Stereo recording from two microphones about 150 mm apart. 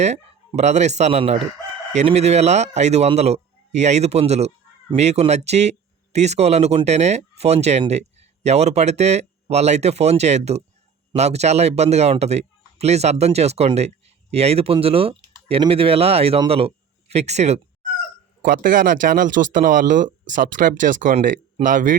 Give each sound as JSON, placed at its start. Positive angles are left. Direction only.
{"t": 0.0, "sound": "a man's voice", "side_deg": -50}
{"t": 18.4, "sound": "speech", "side_deg": -65}